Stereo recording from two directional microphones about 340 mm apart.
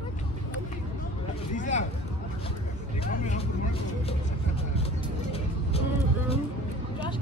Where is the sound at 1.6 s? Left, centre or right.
Left.